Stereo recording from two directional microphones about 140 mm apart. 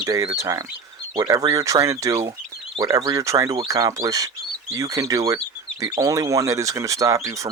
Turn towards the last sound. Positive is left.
turn(degrees=-25)  # may be behind; listen again after turning